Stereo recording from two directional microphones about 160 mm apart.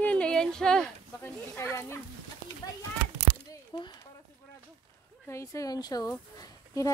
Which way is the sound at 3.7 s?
30° left (ahead or behind).